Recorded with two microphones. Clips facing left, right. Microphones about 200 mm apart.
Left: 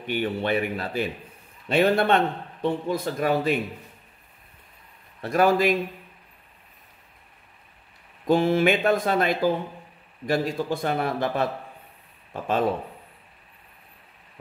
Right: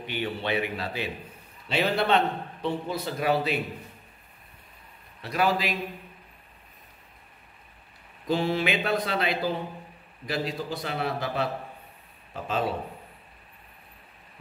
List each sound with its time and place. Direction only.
0.0 s a man's voice: 50° left (ahead or behind)
5.2 s a man's voice: 50° left (ahead or behind)
8.3 s a man's voice: 50° left (ahead or behind)
12.4 s a man's voice: 50° left (ahead or behind)